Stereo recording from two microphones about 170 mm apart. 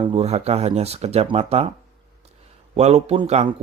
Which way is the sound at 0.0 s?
35° right (ahead or behind).